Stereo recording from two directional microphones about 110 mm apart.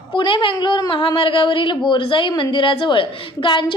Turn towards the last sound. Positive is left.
turn(degrees=50)  # may be behind; listen again after turning